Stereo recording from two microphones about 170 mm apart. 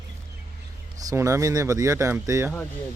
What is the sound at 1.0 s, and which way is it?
Speech, 20° right (ahead or behind).